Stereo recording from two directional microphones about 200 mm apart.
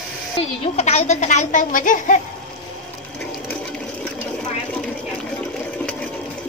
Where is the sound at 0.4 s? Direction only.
35° left (ahead or behind).